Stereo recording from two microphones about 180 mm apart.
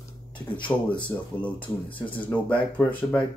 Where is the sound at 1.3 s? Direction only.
30° left (ahead or behind).